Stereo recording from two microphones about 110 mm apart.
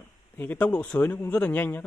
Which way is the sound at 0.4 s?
15° left (ahead or behind).